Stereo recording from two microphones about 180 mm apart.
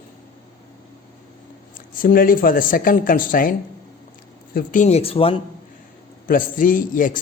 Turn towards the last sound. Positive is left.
turn(degrees=50)  # may be behind; listen again after turning